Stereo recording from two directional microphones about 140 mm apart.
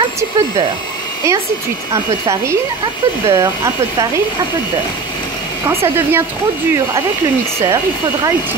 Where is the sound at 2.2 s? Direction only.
20° right (ahead or behind).